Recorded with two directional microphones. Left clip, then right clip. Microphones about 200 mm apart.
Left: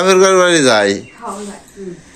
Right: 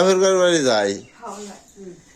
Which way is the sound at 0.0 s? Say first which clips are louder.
Left 6 dB; 10° right (ahead or behind).